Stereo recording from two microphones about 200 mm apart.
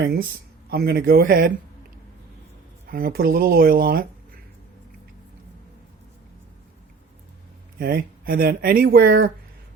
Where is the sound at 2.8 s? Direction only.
50° right (ahead or behind).